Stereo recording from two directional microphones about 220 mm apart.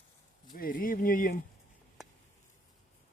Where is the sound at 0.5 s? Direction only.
40° left (ahead or behind).